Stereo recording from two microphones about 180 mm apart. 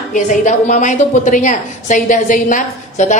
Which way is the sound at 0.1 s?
45° left (ahead or behind).